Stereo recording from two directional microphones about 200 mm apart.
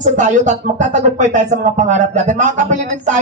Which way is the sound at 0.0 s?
40° right (ahead or behind).